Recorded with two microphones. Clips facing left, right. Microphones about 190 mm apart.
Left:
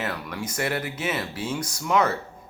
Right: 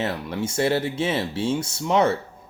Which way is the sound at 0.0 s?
25° right (ahead or behind).